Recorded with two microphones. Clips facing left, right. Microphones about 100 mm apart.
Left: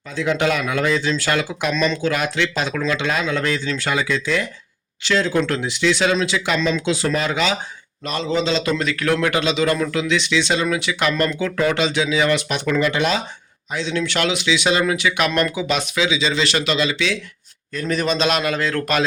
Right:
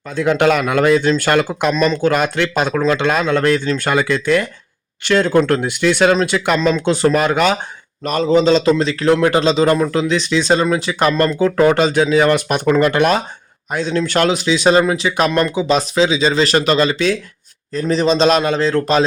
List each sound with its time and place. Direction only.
0.2 s speech: 55° right (ahead or behind)
1.7 s speech: 40° right (ahead or behind)
17.7 s a man's voice: 25° right (ahead or behind)